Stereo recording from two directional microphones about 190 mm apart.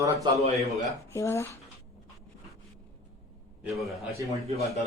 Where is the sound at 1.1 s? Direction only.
15° left (ahead or behind).